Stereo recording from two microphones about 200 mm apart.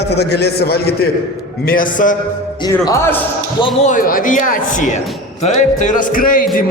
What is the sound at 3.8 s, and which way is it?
A man's voice, 40° left (ahead or behind).